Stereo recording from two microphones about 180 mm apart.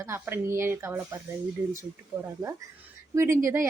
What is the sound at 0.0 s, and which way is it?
A woman's voice, 15° right (ahead or behind).